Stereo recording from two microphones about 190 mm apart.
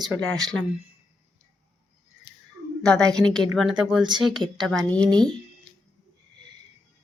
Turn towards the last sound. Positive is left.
turn(degrees=-20)  # may be behind; listen again after turning